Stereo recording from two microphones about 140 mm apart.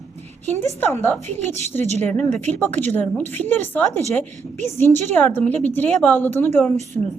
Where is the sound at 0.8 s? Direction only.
15° left (ahead or behind).